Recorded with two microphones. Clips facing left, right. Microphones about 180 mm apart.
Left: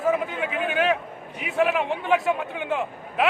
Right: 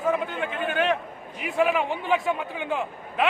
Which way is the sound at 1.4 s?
Centre (ahead or behind).